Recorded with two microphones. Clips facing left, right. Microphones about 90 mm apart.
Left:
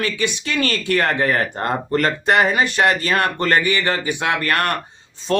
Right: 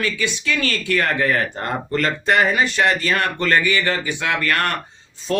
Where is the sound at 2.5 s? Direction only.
45° left (ahead or behind).